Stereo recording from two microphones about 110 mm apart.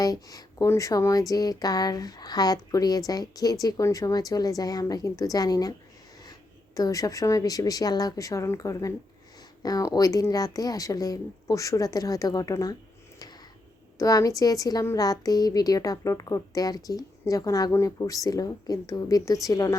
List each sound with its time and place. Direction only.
0.0 s a woman's voice: 35° left (ahead or behind)
6.7 s a woman's voice: 30° left (ahead or behind)
14.0 s a woman's voice: 30° left (ahead or behind)